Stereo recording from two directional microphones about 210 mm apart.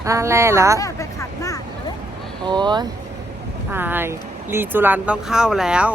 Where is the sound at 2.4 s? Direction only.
20° right (ahead or behind).